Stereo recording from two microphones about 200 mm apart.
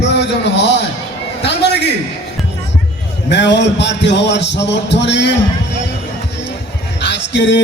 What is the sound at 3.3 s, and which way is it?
Music, 60° left (ahead or behind).